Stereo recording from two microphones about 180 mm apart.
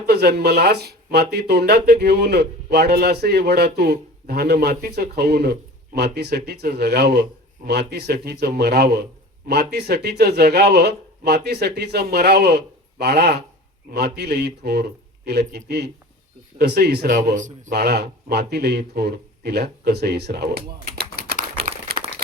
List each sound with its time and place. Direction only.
0.0 s speech: 65° right (ahead or behind)
21.9 s crumpling: 60° right (ahead or behind)